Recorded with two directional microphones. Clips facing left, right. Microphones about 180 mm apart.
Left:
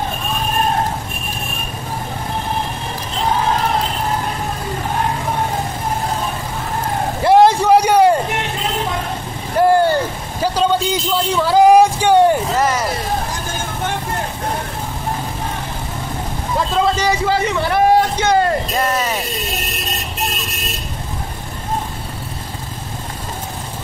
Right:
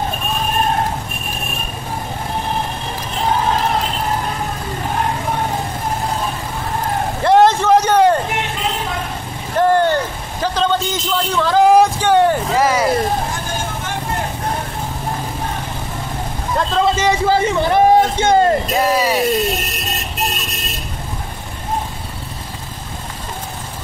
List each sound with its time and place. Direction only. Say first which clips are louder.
7.2 s vehicle: left 1 dB; 10° left (ahead or behind)
9.6 s vehicle: left 1 dB; 10° left (ahead or behind)
10.4 s a sound: left 1 dB; 10° left (ahead or behind)
12.5 s vehicle: right 2 dB; 10° right (ahead or behind)
16.5 s vehicle: right 1 dB; 5° left (ahead or behind)
16.9 s a sound: right 2 dB; 25° right (ahead or behind)
18.8 s vehicle: right 3 dB; 10° right (ahead or behind)